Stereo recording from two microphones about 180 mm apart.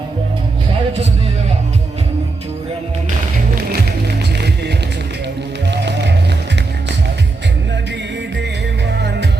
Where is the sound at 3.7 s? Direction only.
65° right (ahead or behind).